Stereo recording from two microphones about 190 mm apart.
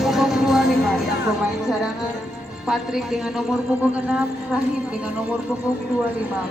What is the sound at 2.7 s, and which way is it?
Speech, 5° right (ahead or behind).